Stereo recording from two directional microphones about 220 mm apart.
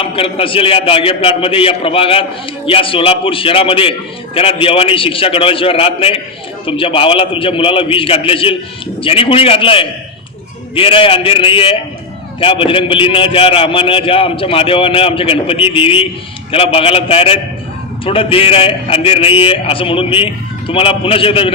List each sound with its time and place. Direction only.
0.0 s a man's voice: 25° left (ahead or behind)